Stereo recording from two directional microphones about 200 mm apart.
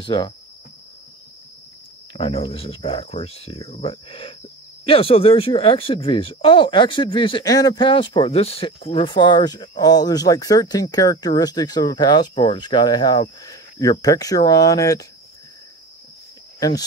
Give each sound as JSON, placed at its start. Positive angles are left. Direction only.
{"t": 0.0, "sound": "speech", "side_deg": 25}
{"t": 2.1, "sound": "speech", "side_deg": 30}
{"t": 16.5, "sound": "speech", "side_deg": 20}